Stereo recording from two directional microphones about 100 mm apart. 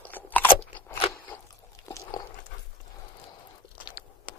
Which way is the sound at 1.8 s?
30° left (ahead or behind).